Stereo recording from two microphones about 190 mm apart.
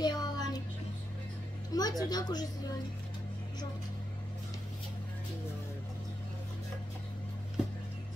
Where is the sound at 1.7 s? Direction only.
20° left (ahead or behind).